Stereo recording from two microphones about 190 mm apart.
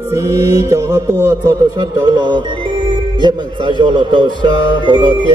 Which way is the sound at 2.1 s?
25° right (ahead or behind).